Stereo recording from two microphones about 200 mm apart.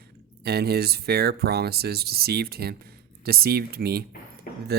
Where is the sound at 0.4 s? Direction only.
50° right (ahead or behind).